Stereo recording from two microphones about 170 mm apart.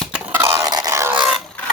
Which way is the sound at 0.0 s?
10° right (ahead or behind).